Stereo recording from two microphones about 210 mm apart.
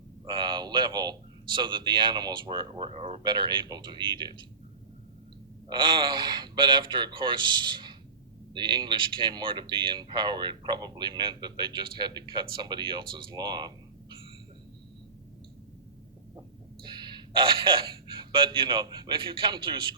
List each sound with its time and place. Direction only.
0.3 s speech: 20° right (ahead or behind)
5.6 s speech: 20° right (ahead or behind)
16.8 s a sound: 20° right (ahead or behind)
18.1 s speech: 25° right (ahead or behind)